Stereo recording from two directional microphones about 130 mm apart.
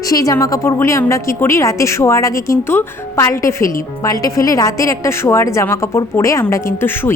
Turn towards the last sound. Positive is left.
turn(degrees=15)  # may be behind; listen again after turning